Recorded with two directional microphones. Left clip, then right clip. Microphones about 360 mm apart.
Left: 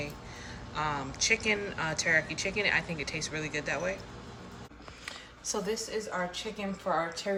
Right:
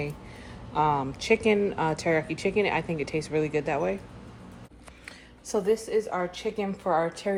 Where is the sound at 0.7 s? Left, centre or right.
Centre.